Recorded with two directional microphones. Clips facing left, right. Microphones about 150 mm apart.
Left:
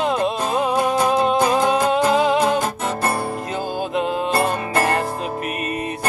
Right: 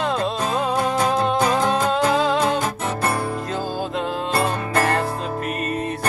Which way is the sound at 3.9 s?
20° left (ahead or behind).